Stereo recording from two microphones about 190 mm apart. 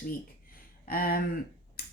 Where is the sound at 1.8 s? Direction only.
55° left (ahead or behind).